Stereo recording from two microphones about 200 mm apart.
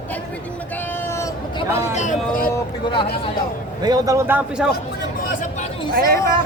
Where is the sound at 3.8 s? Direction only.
20° right (ahead or behind).